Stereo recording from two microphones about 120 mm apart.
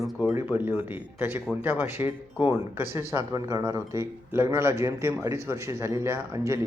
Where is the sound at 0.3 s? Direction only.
15° right (ahead or behind).